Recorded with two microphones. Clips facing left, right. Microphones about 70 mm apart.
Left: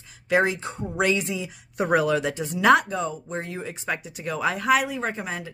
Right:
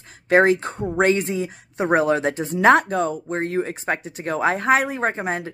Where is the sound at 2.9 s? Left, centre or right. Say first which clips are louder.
Right 6 dB; right.